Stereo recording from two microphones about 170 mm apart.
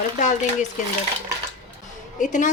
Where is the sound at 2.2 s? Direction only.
45° left (ahead or behind).